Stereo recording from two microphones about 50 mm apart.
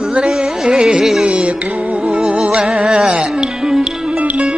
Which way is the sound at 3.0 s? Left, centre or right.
Centre.